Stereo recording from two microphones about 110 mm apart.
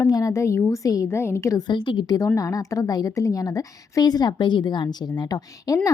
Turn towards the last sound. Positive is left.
turn(degrees=35)  # may be behind; listen again after turning